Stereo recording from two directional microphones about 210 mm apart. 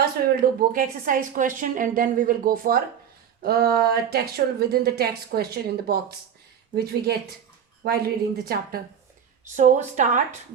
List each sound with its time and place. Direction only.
0.6 s a woman's voice: 40° right (ahead or behind)
9.6 s a woman's voice: 35° right (ahead or behind)